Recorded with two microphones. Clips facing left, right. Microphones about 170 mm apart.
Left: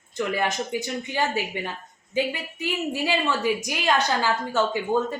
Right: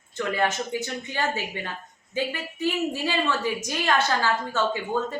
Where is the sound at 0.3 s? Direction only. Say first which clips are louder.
Right 3 dB; 15° left (ahead or behind).